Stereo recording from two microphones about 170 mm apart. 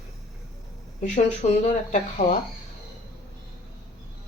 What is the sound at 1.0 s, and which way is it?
Speech, 40° left (ahead or behind).